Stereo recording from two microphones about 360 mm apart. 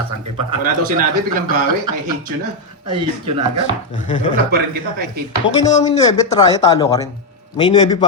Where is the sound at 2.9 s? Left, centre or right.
Centre.